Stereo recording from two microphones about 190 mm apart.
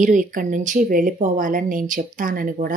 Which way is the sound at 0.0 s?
45° right (ahead or behind).